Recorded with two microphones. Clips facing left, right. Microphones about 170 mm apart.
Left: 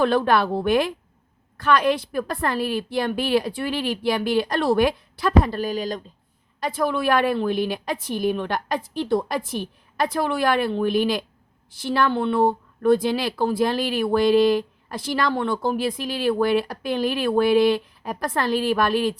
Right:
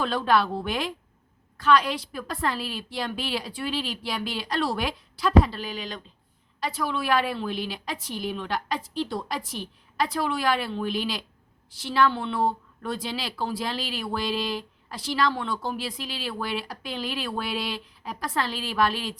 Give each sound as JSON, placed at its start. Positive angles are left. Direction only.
{"t": 0.0, "sound": "a woman's voice", "side_deg": 55}